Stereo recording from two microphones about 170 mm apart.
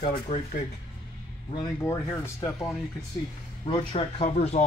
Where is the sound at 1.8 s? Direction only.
15° left (ahead or behind).